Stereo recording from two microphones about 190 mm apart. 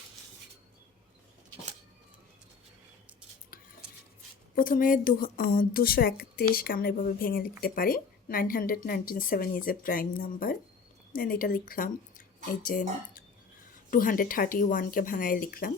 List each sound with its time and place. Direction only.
4.5 s a woman's voice: 45° left (ahead or behind)